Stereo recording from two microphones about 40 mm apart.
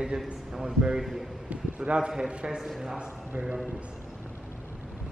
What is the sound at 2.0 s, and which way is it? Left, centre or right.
Speech, right.